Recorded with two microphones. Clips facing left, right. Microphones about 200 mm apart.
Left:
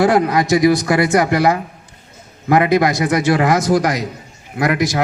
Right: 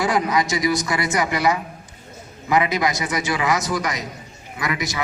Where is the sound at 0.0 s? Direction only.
55° left (ahead or behind).